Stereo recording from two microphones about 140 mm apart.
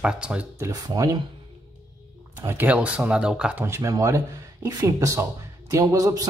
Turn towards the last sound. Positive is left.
turn(degrees=-25)  # may be behind; listen again after turning